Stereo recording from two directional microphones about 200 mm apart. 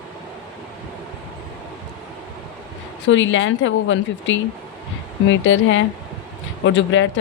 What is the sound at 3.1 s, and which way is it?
Speech, 70° left (ahead or behind).